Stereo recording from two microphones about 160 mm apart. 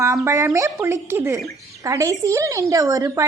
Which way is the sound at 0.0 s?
20° right (ahead or behind).